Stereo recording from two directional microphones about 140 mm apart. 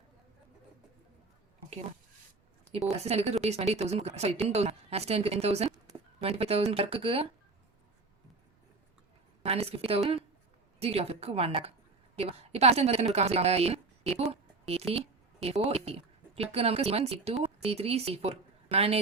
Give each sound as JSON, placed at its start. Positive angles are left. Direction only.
{"t": 3.0, "sound": "a woman's voice", "side_deg": -50}
{"t": 9.4, "sound": "a woman's voice", "side_deg": -45}